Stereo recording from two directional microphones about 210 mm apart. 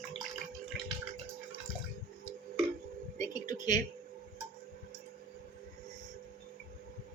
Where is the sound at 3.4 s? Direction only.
20° left (ahead or behind).